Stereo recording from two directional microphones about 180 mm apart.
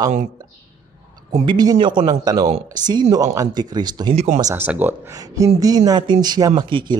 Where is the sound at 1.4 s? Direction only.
25° right (ahead or behind).